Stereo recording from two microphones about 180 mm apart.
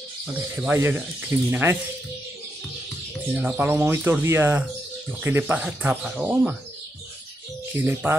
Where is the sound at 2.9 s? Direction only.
5° right (ahead or behind).